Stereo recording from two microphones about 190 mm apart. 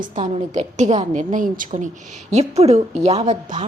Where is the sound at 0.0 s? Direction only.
40° right (ahead or behind).